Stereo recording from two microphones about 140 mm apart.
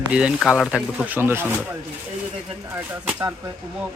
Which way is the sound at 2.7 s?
15° right (ahead or behind).